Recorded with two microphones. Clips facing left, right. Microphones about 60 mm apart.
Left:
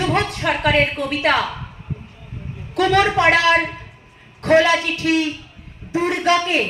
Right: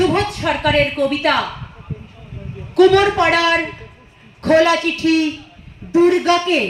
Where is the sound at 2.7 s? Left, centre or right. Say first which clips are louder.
Right 5 dB; centre.